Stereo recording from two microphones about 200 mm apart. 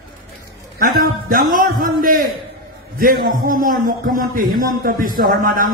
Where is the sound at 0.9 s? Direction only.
45° right (ahead or behind).